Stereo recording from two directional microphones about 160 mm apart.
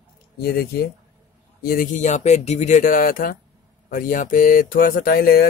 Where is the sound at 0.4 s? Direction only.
75° left (ahead or behind).